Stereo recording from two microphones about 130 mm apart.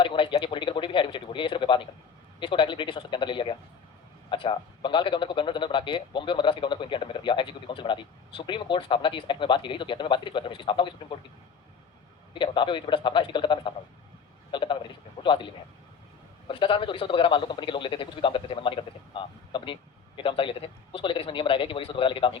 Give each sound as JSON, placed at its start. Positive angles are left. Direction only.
{"t": 0.0, "sound": "a man's voice", "side_deg": 40}
{"t": 12.3, "sound": "a man's voice", "side_deg": 40}